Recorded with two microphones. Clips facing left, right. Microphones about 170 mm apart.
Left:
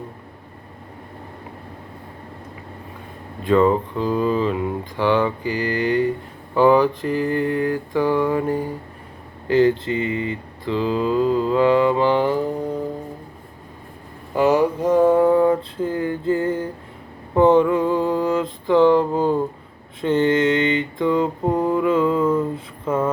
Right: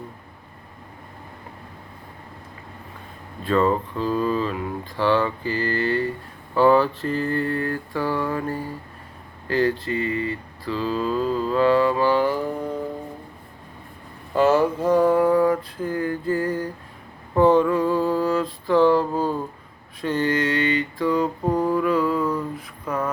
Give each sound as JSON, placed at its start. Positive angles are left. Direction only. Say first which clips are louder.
{"t": 3.4, "sound": "speech", "louder": "left 4 dB", "side_deg": 15}
{"t": 9.5, "sound": "mantra", "louder": "left 5 dB", "side_deg": 20}
{"t": 14.3, "sound": "mantra", "louder": "left 1 dB", "side_deg": 15}